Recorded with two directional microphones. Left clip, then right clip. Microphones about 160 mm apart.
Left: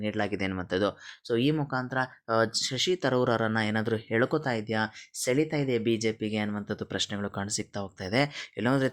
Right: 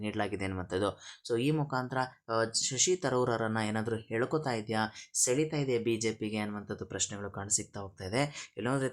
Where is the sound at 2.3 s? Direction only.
30° left (ahead or behind).